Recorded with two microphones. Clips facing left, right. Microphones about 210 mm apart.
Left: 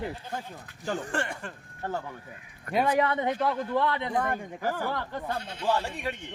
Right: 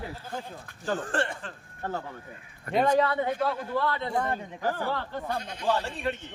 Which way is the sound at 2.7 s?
15° left (ahead or behind).